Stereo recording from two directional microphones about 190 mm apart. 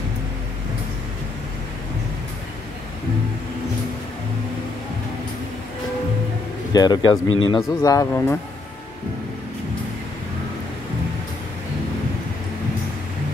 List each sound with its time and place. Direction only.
6.7 s speech: 20° left (ahead or behind)